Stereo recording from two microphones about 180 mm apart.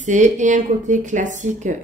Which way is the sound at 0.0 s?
40° right (ahead or behind).